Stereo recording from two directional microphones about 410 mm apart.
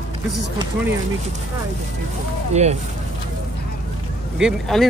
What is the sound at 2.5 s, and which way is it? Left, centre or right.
Speech, centre.